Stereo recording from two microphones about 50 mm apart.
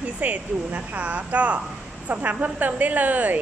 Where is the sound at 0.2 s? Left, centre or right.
Right.